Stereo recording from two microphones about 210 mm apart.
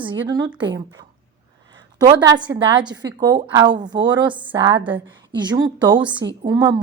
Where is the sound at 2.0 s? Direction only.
20° right (ahead or behind).